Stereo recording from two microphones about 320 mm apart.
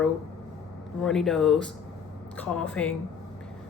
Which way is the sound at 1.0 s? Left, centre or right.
Centre.